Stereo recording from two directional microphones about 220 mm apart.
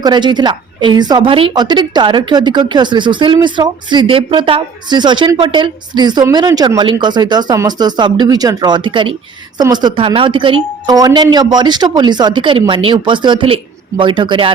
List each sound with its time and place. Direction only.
0.0 s a woman's voice: 20° right (ahead or behind)